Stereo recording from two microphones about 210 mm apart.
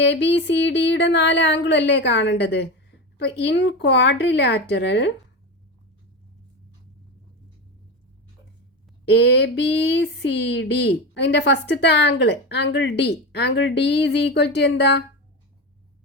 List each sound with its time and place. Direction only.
0.0 s speech: 55° left (ahead or behind)
9.0 s speech: 55° left (ahead or behind)